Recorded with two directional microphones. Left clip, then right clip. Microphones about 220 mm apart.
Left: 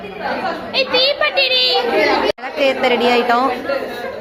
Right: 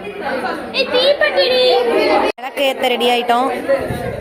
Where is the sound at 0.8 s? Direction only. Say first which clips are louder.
Right 2 dB; 35° left (ahead or behind).